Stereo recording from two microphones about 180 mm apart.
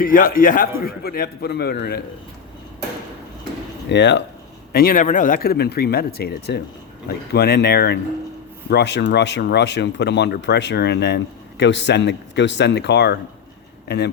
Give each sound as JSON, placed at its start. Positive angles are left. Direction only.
{"t": 0.0, "sound": "a man's voice", "side_deg": 50}
{"t": 3.8, "sound": "speech", "side_deg": 80}
{"t": 4.7, "sound": "speech", "side_deg": 55}